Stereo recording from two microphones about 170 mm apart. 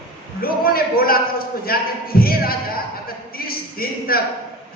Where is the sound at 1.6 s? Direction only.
60° left (ahead or behind).